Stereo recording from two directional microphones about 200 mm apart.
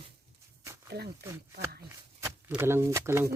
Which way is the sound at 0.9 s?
55° right (ahead or behind).